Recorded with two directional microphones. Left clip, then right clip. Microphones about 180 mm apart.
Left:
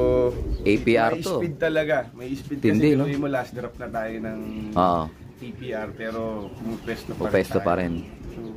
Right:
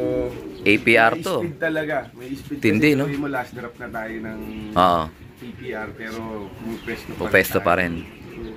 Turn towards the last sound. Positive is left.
turn(degrees=5)  # may be behind; listen again after turning